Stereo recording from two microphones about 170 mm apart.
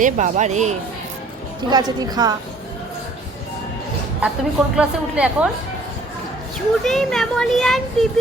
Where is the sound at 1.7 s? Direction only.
25° right (ahead or behind).